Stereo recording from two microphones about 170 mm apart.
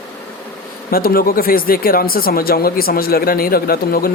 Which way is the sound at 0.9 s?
60° left (ahead or behind).